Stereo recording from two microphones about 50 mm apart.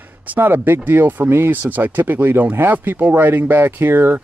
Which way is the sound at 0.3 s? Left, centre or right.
Right.